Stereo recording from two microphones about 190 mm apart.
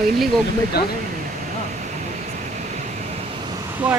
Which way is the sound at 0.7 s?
55° left (ahead or behind).